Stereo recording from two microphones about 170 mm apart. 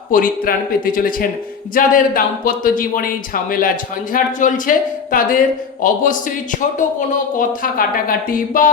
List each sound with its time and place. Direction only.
0.1 s a man's voice: 55° left (ahead or behind)